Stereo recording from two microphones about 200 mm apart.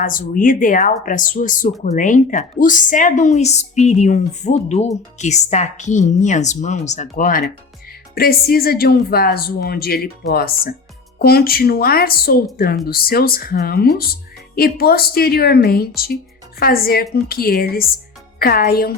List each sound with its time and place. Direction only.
0.0 s a woman's voice: 45° left (ahead or behind)